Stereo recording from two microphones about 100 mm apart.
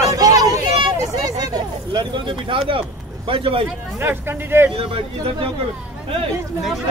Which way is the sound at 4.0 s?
20° right (ahead or behind).